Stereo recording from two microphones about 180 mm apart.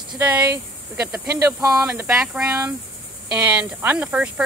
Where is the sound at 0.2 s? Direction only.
10° right (ahead or behind).